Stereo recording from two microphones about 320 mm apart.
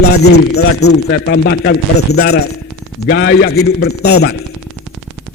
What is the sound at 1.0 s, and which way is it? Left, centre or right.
Speech, left.